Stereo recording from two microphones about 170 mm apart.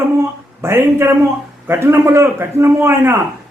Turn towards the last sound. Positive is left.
turn(degrees=-15)  # may be behind; listen again after turning